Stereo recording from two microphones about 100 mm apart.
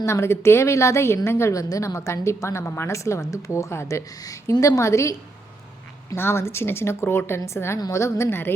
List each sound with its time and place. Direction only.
0.0 s a woman's voice: 25° left (ahead or behind)
6.1 s a woman's voice: 25° left (ahead or behind)